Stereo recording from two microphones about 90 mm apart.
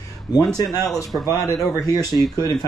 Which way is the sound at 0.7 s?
40° left (ahead or behind).